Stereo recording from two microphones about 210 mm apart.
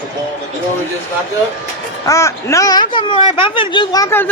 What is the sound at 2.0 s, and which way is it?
Speech, 15° left (ahead or behind).